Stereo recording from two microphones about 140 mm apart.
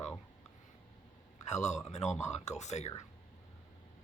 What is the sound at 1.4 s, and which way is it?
Speech, 55° left (ahead or behind).